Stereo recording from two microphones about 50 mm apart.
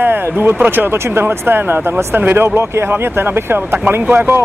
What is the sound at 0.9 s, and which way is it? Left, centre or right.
Speech, right.